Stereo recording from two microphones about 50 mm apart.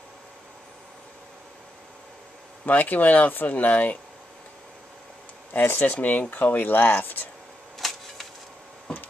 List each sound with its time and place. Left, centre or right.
2.6 s speech: left
5.5 s speech: left
7.8 s a sound: centre